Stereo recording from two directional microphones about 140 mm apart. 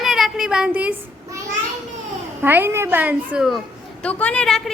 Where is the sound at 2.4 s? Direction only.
15° right (ahead or behind).